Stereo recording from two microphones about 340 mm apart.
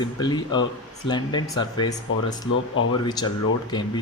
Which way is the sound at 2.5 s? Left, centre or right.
Left.